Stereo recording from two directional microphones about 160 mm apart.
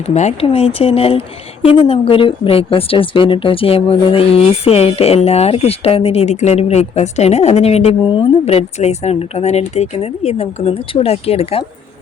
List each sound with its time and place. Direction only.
0.1 s a woman's voice: 45° left (ahead or behind)